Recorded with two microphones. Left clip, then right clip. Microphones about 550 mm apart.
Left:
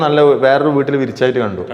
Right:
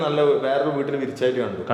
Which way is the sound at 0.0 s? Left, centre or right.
Left.